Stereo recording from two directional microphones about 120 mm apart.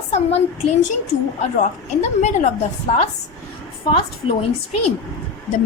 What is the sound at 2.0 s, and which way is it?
A woman's voice, 70° left (ahead or behind).